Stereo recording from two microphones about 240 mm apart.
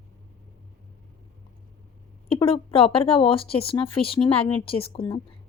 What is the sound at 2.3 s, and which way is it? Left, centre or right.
Speech, left.